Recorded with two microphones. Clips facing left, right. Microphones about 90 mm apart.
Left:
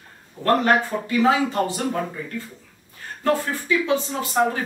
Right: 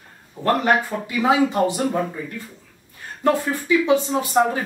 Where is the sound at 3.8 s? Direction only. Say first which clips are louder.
Right 4 dB; 20° right (ahead or behind).